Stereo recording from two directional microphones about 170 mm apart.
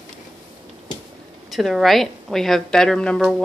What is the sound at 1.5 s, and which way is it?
A woman's voice, centre (ahead or behind).